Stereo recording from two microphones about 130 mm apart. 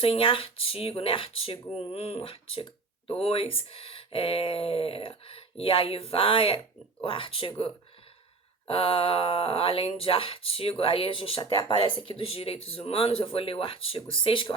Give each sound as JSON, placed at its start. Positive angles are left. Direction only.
{"t": 0.0, "sound": "speech", "side_deg": 45}
{"t": 8.6, "sound": "speech", "side_deg": 45}